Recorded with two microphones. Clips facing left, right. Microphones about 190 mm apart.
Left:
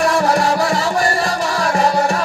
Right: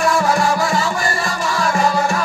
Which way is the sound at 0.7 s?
35° left (ahead or behind).